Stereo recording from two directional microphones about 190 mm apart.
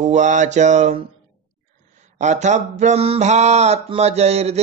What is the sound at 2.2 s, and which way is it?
Mantra, 40° right (ahead or behind).